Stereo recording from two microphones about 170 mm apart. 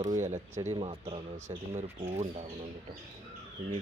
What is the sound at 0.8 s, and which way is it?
Speech, 35° right (ahead or behind).